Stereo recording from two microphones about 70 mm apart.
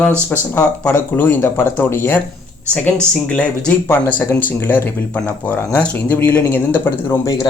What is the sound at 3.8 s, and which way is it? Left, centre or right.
Speech, left.